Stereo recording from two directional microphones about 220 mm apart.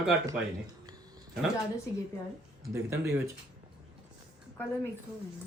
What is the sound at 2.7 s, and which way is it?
Speech, 10° right (ahead or behind).